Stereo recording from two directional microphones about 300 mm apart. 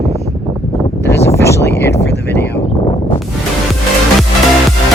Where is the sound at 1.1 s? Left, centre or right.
Centre.